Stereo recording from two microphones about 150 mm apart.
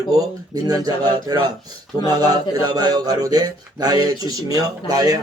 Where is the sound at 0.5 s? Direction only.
25° right (ahead or behind).